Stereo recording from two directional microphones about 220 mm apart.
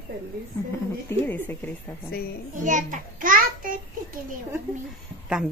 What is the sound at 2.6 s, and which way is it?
A child's voice, 35° right (ahead or behind).